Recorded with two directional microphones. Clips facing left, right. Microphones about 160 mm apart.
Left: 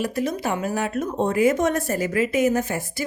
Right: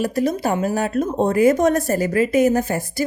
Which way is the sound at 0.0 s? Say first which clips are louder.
Right 4 dB; 35° right (ahead or behind).